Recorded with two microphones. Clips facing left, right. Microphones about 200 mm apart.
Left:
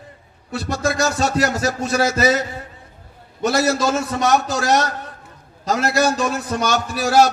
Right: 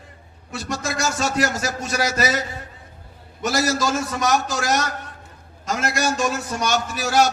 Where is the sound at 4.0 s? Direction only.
30° left (ahead or behind).